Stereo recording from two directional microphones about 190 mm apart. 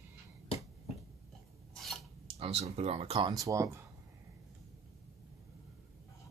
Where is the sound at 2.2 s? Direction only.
30° right (ahead or behind).